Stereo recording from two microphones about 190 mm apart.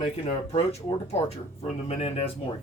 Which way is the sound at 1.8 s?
35° left (ahead or behind).